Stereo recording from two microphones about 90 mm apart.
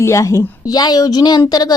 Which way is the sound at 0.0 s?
35° left (ahead or behind).